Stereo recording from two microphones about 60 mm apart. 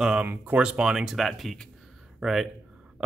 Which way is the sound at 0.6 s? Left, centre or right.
Centre.